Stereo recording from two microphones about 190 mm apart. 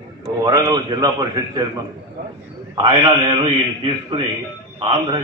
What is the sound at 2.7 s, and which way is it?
Speech, 25° right (ahead or behind).